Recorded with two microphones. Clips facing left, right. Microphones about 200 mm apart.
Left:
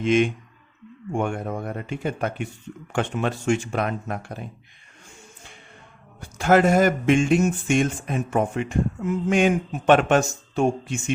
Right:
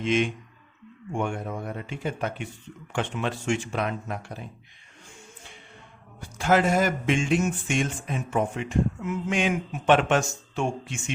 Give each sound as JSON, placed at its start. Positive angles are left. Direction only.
{"t": 0.0, "sound": "speech", "side_deg": 50}
{"t": 6.4, "sound": "speech", "side_deg": 50}